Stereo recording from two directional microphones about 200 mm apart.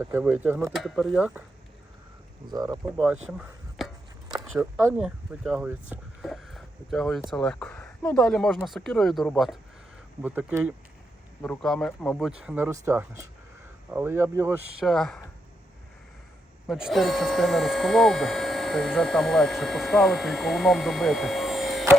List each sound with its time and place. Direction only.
0.0 s speech: 10° right (ahead or behind)
2.5 s speech: 20° right (ahead or behind)
2.8 s speech: 5° right (ahead or behind)
3.2 s a sound: centre (ahead or behind)
4.8 s speech: 5° right (ahead or behind)
12.4 s speech: 5° right (ahead or behind)
14.8 s speech: centre (ahead or behind)
16.6 s speech: centre (ahead or behind)